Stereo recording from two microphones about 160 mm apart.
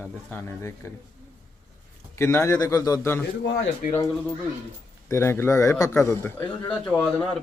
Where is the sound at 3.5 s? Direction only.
80° left.